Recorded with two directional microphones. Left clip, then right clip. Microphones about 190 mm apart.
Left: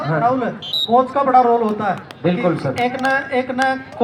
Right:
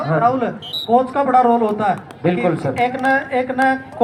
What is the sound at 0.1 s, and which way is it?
A man's voice, 45° left (ahead or behind).